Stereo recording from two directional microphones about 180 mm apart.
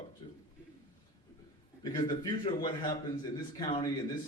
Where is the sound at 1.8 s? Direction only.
25° left (ahead or behind).